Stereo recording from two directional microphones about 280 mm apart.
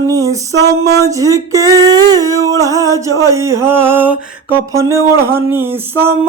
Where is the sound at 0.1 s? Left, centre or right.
Centre.